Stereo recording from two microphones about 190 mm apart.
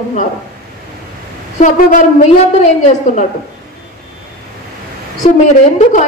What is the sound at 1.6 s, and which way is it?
Speech, 40° left (ahead or behind).